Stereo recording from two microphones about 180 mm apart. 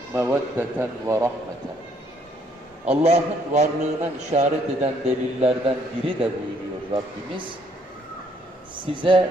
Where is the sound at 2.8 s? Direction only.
35° right (ahead or behind).